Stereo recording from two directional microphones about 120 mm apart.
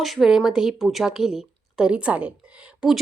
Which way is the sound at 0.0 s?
Centre (ahead or behind).